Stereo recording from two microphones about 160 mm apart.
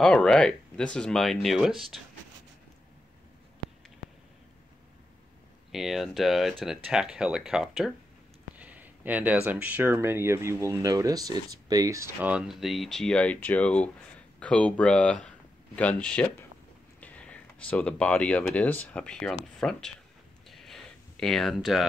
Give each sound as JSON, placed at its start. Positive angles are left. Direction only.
{"t": 0.0, "sound": "speech", "side_deg": 5}
{"t": 5.7, "sound": "speech", "side_deg": 0}
{"t": 8.5, "sound": "a sound", "side_deg": -10}
{"t": 9.5, "sound": "speech", "side_deg": -10}
{"t": 12.3, "sound": "speech", "side_deg": -5}
{"t": 20.4, "sound": "a sound", "side_deg": 0}